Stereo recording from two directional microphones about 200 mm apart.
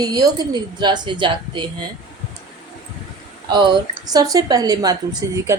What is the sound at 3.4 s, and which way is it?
A woman's voice, 20° right (ahead or behind).